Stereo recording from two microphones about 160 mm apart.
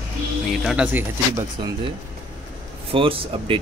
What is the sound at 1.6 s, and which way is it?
Speech, 25° right (ahead or behind).